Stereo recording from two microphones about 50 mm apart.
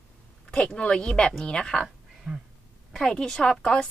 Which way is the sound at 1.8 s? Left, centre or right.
Centre.